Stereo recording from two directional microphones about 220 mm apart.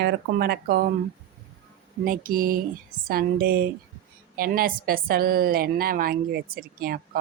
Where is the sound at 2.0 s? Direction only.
40° right (ahead or behind).